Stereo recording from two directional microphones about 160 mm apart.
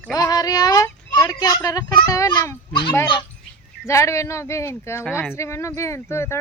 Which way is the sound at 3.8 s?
20° left (ahead or behind).